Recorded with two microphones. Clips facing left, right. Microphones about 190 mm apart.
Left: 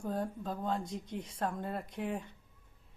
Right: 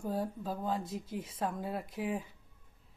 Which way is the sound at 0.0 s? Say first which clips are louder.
Right 1 dB; 5° right (ahead or behind).